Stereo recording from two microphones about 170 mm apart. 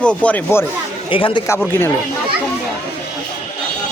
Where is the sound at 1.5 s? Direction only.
10° left (ahead or behind).